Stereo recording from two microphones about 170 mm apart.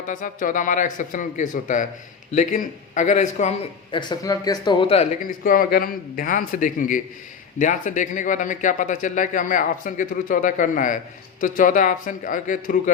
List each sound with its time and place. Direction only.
0.1 s speech: 50° left (ahead or behind)
3.9 s speech: 25° left (ahead or behind)
5.2 s speech: 55° left (ahead or behind)